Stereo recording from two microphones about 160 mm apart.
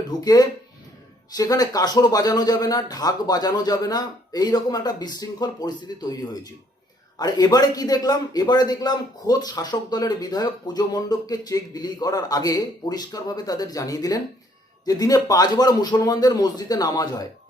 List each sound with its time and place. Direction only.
0.1 s a man's voice: 25° left (ahead or behind)